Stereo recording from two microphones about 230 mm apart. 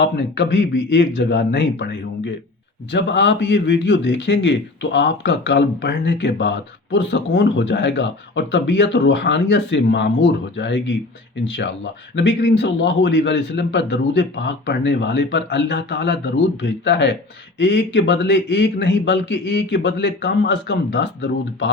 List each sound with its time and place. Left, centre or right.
0.0 s speech: left